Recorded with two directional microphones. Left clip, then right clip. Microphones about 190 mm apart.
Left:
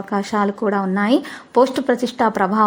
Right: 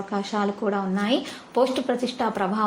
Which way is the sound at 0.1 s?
35° left (ahead or behind).